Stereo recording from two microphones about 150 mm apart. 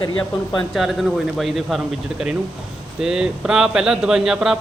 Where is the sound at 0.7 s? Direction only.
Centre (ahead or behind).